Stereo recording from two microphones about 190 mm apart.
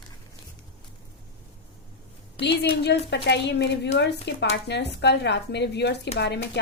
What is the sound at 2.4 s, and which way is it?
Speech, 65° left (ahead or behind).